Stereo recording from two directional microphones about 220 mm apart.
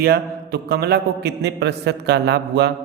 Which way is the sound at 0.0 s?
45° right (ahead or behind).